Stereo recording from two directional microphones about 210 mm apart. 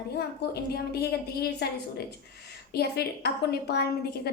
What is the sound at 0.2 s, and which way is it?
A woman's voice, 50° left (ahead or behind).